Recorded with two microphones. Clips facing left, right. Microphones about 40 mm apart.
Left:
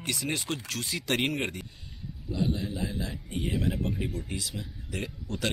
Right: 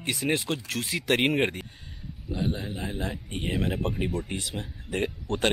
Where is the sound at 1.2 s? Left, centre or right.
Right.